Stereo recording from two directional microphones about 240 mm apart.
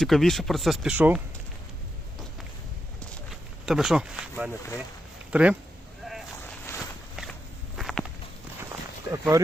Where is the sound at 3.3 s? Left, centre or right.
Centre.